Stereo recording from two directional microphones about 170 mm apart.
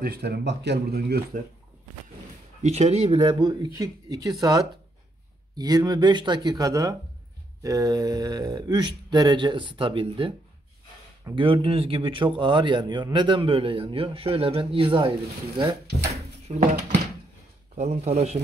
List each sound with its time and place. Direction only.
0.0 s speech: 65° right (ahead or behind)
2.6 s a man's voice: 40° right (ahead or behind)
3.2 s speech: 25° right (ahead or behind)
11.3 s a man's voice: 30° right (ahead or behind)
17.7 s a man's voice: 40° right (ahead or behind)